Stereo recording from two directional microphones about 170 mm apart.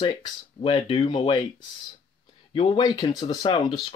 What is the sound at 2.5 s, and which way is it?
Speech, 30° left (ahead or behind).